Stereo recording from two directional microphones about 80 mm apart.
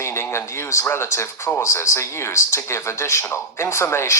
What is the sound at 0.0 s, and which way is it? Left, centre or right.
Speech, left.